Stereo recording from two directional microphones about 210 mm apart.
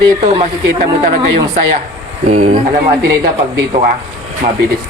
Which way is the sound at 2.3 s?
35° right (ahead or behind).